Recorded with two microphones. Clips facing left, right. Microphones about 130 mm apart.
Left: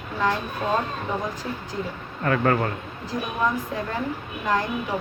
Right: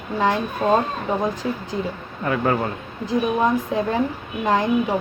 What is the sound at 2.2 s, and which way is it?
Speech, 15° right (ahead or behind).